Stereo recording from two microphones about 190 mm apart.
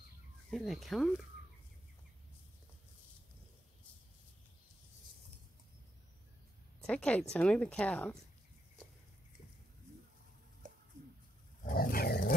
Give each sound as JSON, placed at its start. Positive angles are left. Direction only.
{"t": 0.5, "sound": "speech", "side_deg": 0}
{"t": 6.9, "sound": "speech", "side_deg": 5}
{"t": 10.6, "sound": "bird", "side_deg": -40}
{"t": 11.6, "sound": "dog", "side_deg": 50}